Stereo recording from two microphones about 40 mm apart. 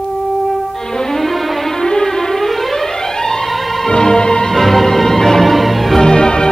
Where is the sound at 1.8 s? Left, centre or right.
Centre.